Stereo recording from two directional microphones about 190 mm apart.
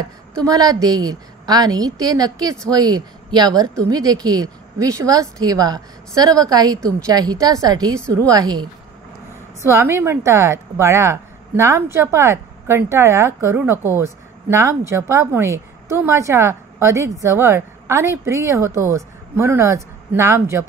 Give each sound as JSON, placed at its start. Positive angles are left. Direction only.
{"t": 0.4, "sound": "a woman's voice", "side_deg": -20}
{"t": 9.7, "sound": "a woman's voice", "side_deg": -15}